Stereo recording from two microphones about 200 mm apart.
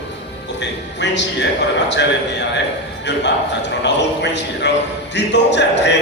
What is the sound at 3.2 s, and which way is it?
A man's voice, 60° left (ahead or behind).